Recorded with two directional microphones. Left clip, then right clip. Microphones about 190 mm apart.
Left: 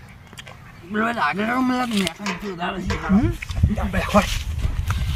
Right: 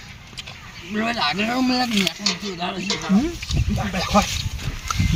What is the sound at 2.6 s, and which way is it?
Speech, centre (ahead or behind).